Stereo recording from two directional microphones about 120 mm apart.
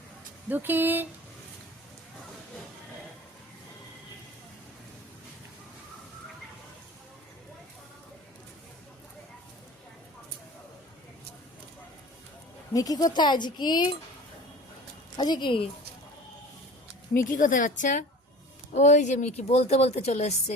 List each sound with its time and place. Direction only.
0.4 s speech: 15° right (ahead or behind)
12.7 s speech: 30° left (ahead or behind)
15.1 s speech: 35° left (ahead or behind)
17.2 s a woman's voice: 90° left; by 20.3 s 65° left (ahead or behind)